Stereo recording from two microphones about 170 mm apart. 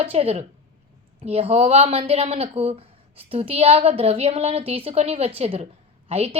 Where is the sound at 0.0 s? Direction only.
35° right (ahead or behind).